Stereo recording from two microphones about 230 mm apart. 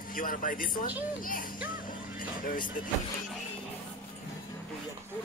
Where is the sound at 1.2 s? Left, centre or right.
Left.